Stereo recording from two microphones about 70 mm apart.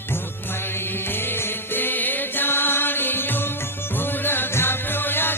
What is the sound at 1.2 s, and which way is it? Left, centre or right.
Music, left.